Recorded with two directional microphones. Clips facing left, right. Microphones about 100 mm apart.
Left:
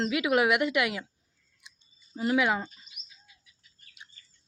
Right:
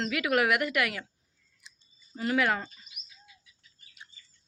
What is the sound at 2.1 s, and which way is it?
Speech, 15° left (ahead or behind).